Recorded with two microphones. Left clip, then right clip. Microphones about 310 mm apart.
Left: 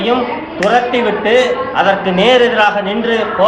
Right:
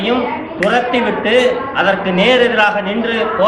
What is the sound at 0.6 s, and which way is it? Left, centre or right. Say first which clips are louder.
A man's voice: left 2 dB; centre.